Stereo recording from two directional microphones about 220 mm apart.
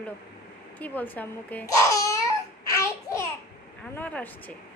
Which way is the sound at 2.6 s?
15° left (ahead or behind).